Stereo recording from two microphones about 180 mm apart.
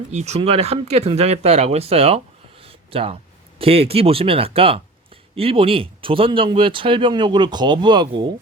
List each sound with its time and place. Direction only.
0.1 s speech: 35° right (ahead or behind)
2.6 s a sound: 30° right (ahead or behind)
3.6 s speech: 35° right (ahead or behind)